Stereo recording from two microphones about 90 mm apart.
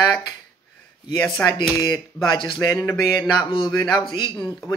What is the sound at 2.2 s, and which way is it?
A woman's voice, 60° left (ahead or behind).